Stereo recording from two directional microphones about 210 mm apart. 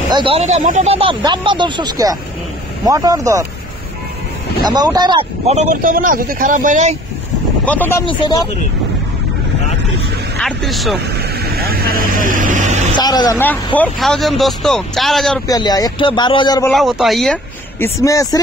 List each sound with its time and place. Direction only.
0.1 s speech: 25° right (ahead or behind)
4.6 s speech: 20° right (ahead or behind); by 7.0 s 35° right (ahead or behind)
7.6 s speech: 10° left (ahead or behind)
8.1 s a man's voice: 20° left (ahead or behind)
10.4 s speech: centre (ahead or behind)
11.5 s vehicle: 45° right (ahead or behind)
12.9 s a man's voice: 20° left (ahead or behind)
13.7 s speech: centre (ahead or behind)
15.4 s a man's voice: 15° left (ahead or behind)
16.7 s speech: centre (ahead or behind); by 18.4 s 15° left (ahead or behind)